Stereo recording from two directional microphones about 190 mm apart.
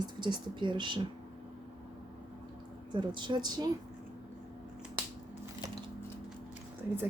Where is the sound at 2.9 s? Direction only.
25° right (ahead or behind).